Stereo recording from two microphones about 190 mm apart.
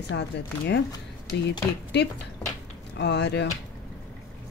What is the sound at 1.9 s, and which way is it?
Speech, 65° left (ahead or behind).